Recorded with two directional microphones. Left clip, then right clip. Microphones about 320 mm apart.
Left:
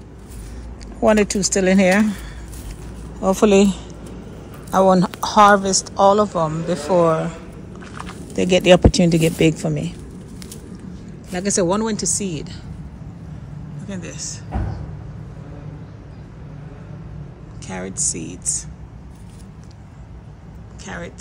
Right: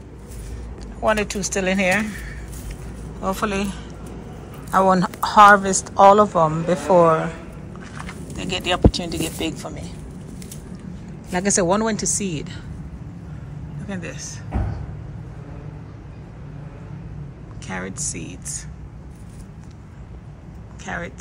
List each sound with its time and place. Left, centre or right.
1.0 s a woman's voice: centre
7.9 s a sound: centre
8.4 s speech: left
9.0 s speech: left
11.3 s a woman's voice: centre
13.8 s speech: centre
17.6 s a woman's voice: centre
20.8 s speech: centre